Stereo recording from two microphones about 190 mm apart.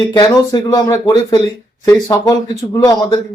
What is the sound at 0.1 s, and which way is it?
Speech, 20° left (ahead or behind).